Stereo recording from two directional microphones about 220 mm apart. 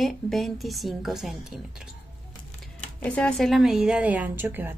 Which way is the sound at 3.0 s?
5° left (ahead or behind).